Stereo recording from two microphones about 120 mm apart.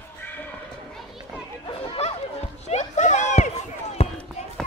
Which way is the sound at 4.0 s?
55° left (ahead or behind).